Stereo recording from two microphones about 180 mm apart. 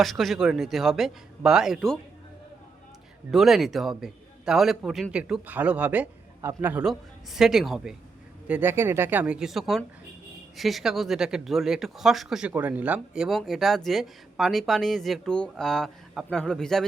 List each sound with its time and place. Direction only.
0.0 s speech: centre (ahead or behind)
3.3 s speech: centre (ahead or behind)